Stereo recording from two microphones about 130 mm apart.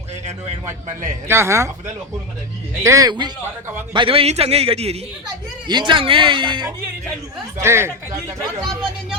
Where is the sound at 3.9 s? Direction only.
45° right (ahead or behind).